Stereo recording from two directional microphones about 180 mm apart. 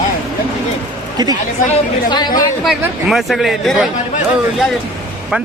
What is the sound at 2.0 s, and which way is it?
Speech, 25° left (ahead or behind).